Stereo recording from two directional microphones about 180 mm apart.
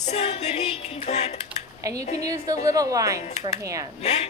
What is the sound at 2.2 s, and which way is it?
Speech, 20° right (ahead or behind).